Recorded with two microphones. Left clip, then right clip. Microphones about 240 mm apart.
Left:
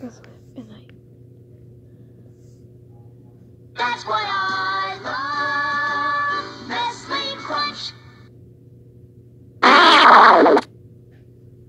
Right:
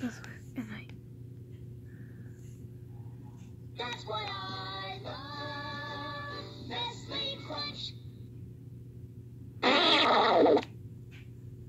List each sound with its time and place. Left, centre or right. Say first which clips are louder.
3.7 s music: left 15 dB; left
4.3 s child singing: left 18 dB; left
4.7 s music: left 16 dB; left
9.6 s fart: left 15 dB; left